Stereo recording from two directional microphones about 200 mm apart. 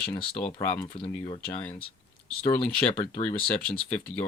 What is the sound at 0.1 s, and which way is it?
Speech, 35° left (ahead or behind).